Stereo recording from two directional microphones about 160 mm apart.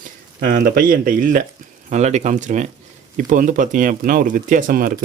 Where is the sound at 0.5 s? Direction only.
60° right (ahead or behind).